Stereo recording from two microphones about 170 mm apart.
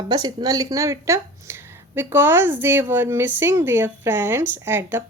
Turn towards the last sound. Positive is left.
turn(degrees=-15)  # may be behind; listen again after turning